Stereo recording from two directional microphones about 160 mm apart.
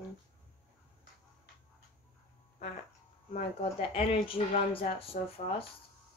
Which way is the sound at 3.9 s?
35° left (ahead or behind).